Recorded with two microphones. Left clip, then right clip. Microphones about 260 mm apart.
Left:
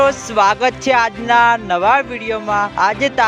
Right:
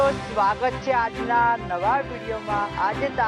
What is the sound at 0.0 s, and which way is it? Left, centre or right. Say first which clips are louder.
Speech: left 8 dB; left.